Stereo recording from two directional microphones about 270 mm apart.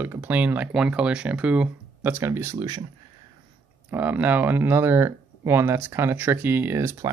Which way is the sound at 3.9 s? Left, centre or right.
Centre.